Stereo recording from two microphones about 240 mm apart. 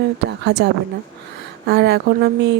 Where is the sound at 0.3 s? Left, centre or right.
Right.